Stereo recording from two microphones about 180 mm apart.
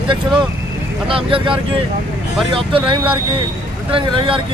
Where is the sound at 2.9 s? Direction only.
30° right (ahead or behind).